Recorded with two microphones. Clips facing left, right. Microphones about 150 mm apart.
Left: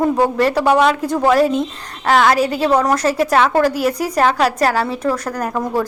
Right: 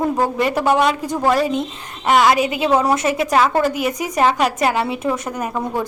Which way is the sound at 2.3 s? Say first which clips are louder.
Left 2 dB; 35° left (ahead or behind).